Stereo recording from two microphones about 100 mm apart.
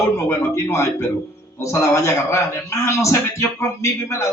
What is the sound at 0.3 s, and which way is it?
A man's voice, 30° left (ahead or behind).